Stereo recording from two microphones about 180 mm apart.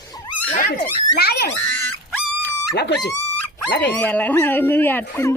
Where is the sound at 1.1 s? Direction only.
60° left (ahead or behind).